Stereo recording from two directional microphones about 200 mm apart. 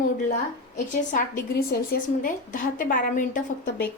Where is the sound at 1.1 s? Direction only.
50° left (ahead or behind).